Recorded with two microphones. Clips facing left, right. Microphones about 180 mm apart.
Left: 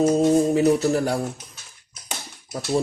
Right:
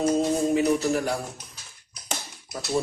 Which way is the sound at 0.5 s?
40° left (ahead or behind).